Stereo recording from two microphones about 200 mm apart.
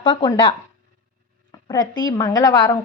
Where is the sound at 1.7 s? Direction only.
20° left (ahead or behind).